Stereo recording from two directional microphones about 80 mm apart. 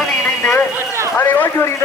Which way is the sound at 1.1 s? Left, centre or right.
Left.